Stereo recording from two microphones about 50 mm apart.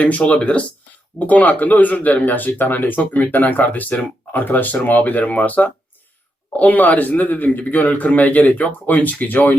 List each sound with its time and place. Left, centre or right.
0.0 s speech: left